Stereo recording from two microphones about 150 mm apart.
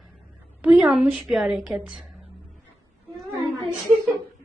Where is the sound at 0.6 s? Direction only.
5° right (ahead or behind).